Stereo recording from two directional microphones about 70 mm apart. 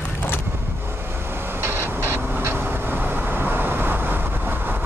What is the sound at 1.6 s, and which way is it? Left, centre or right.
Vehicle, right.